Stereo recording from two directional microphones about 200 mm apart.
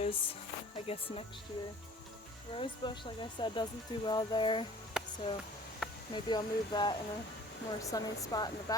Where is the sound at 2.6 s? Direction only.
25° left (ahead or behind).